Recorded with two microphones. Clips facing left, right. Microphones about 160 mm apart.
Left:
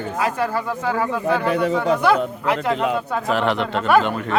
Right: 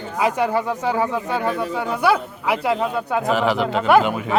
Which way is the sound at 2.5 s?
10° right (ahead or behind).